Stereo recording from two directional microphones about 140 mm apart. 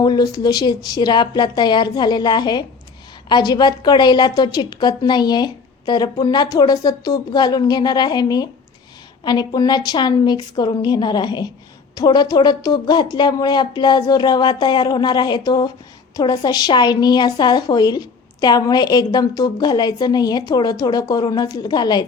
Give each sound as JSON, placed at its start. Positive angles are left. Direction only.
{"t": 0.0, "sound": "a woman's voice", "side_deg": 30}